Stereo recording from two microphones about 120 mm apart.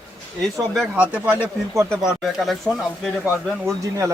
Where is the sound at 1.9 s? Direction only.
Centre (ahead or behind).